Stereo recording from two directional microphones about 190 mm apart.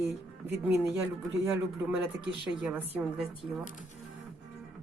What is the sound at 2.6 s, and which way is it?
Speech, 5° right (ahead or behind).